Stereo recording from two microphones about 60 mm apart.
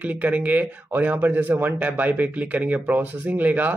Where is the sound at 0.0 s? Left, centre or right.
Right.